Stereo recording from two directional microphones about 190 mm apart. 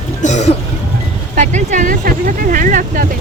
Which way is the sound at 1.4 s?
40° right (ahead or behind).